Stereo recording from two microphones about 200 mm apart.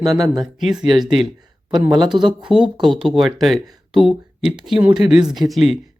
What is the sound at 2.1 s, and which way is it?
Speech, 25° right (ahead or behind).